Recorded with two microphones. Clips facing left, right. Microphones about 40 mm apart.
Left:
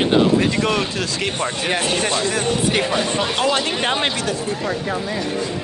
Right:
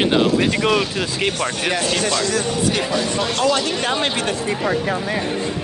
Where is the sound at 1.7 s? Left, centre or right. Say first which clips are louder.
Left 2 dB; left.